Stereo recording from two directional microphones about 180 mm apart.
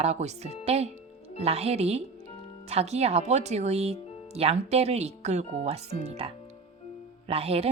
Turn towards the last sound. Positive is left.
turn(degrees=-35)  # may be behind; listen again after turning